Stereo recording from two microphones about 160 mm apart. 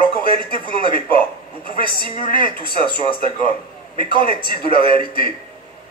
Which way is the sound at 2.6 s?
30° right (ahead or behind).